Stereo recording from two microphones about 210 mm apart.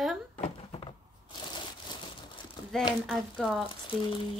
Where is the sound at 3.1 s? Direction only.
Centre (ahead or behind).